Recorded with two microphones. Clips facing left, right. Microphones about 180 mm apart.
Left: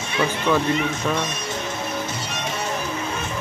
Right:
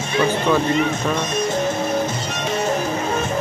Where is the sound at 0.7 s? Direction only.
50° right (ahead or behind).